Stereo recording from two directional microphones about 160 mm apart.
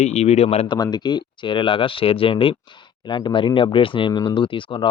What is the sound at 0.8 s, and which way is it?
Speech, 25° left (ahead or behind).